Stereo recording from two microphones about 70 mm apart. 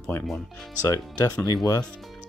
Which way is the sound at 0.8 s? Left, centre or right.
Left.